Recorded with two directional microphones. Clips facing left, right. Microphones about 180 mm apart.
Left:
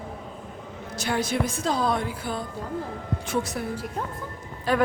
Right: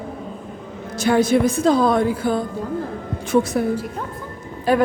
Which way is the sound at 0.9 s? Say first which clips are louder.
Right 10 dB; 50° right (ahead or behind).